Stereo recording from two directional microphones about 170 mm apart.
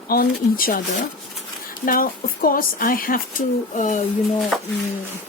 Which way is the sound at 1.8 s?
55° left (ahead or behind).